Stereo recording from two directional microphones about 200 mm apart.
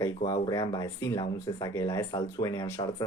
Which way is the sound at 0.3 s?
20° left (ahead or behind).